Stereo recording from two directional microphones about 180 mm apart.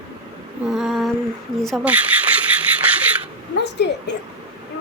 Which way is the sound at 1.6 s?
5° right (ahead or behind).